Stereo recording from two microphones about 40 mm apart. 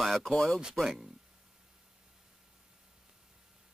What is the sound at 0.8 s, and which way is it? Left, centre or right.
Speech, centre.